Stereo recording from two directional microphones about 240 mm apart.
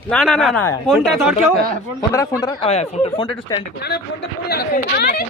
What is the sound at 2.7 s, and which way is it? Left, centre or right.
Speech, left.